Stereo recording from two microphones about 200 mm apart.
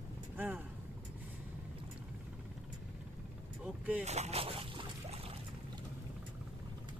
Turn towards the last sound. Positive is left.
turn(degrees=-30)  # may be behind; listen again after turning